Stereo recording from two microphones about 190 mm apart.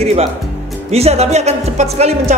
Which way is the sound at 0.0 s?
35° right (ahead or behind).